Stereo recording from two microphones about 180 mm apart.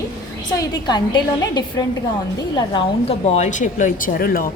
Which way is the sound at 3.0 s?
35° left (ahead or behind).